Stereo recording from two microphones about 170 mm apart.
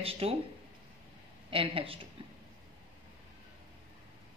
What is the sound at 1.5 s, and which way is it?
Speech, 30° right (ahead or behind).